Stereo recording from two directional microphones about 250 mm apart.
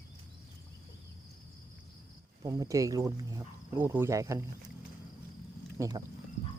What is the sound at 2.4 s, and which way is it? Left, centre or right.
Speech, centre.